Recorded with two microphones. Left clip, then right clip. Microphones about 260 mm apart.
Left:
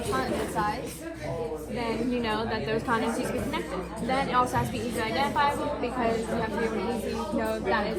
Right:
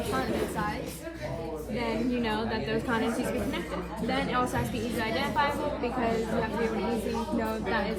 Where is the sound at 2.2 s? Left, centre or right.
Centre.